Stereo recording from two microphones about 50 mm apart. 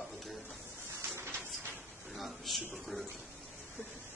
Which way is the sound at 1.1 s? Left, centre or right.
Right.